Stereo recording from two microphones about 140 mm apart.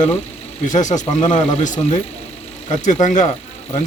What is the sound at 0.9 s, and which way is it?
Speech, 60° left (ahead or behind).